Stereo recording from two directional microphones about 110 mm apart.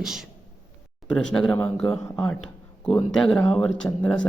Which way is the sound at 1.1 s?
5° left (ahead or behind).